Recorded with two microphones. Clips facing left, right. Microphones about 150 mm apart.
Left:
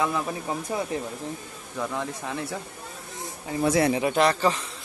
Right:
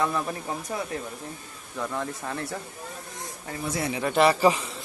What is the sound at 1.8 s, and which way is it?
Speech, centre (ahead or behind).